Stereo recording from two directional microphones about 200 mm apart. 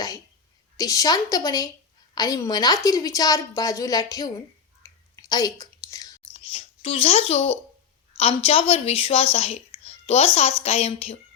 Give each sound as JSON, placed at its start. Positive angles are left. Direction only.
{"t": 0.8, "sound": "a woman's voice", "side_deg": 15}
{"t": 6.6, "sound": "a child's voice", "side_deg": 30}